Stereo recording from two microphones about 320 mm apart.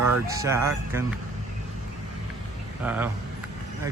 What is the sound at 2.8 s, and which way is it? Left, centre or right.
Speech, centre.